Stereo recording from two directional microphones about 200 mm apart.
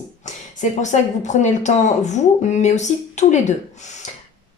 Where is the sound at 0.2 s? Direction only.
35° left (ahead or behind).